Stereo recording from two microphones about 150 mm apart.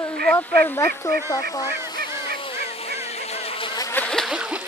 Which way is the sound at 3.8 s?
10° left (ahead or behind).